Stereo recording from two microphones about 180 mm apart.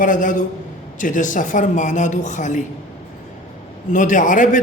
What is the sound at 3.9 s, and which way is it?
Speech, 45° left (ahead or behind).